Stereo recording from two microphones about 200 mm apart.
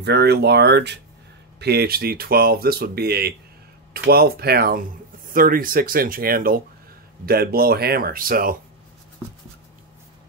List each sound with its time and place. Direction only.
0.0 s speech: 55° right (ahead or behind)